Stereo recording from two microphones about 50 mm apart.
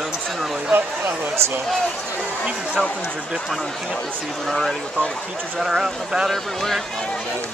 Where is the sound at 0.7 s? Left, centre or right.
Right.